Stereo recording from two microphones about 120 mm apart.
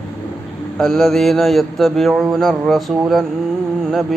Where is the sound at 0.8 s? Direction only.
Centre (ahead or behind).